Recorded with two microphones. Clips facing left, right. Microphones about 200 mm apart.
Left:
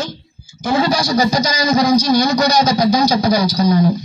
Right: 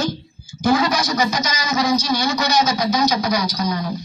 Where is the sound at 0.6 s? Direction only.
30° left (ahead or behind).